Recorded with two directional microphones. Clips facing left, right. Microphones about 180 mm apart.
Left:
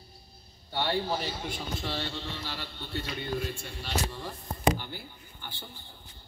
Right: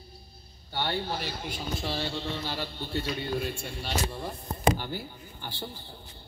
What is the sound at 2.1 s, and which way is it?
Speech, 40° right (ahead or behind).